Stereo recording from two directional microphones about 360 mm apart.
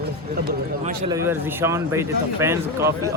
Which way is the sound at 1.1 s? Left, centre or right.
Centre.